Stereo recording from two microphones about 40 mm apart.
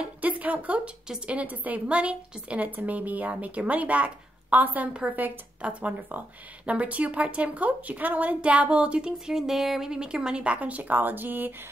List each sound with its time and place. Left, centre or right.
0.2 s a sound: right
1.2 s a woman's voice: right
5.6 s a woman's voice: right
9.3 s speech: centre
9.8 s speech: centre
10.4 s a woman's voice: right